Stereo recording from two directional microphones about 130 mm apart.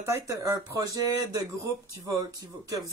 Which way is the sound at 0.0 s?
25° right (ahead or behind).